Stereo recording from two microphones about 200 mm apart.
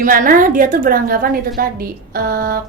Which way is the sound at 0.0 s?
45° right (ahead or behind).